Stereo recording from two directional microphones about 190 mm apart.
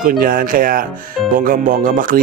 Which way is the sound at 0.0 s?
45° right (ahead or behind).